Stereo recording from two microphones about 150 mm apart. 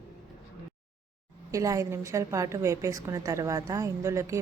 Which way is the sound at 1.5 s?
20° right (ahead or behind).